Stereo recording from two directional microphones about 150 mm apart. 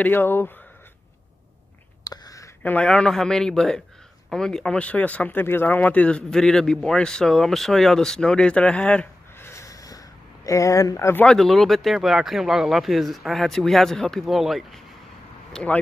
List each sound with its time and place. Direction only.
0.0 s speech: 15° left (ahead or behind)
2.0 s a sound: 25° left (ahead or behind)
2.6 s speech: 10° left (ahead or behind)
11.2 s speech: centre (ahead or behind)